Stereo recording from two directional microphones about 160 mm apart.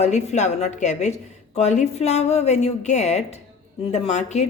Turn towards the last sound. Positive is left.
turn(degrees=45)  # may be behind; listen again after turning